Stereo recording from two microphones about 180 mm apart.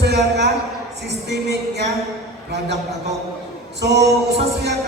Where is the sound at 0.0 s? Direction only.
70° right (ahead or behind).